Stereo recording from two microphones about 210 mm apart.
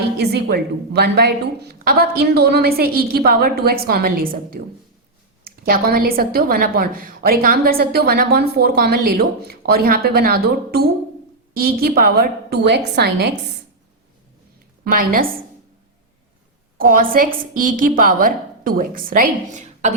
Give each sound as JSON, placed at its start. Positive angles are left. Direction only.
{"t": 0.2, "sound": "a woman's voice", "side_deg": -50}
{"t": 14.8, "sound": "a woman's voice", "side_deg": -40}
{"t": 16.7, "sound": "a woman's voice", "side_deg": -45}